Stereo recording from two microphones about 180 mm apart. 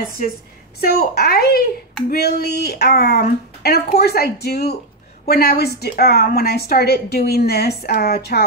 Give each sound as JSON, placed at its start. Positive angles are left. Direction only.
{"t": 0.7, "sound": "a woman's voice", "side_deg": 60}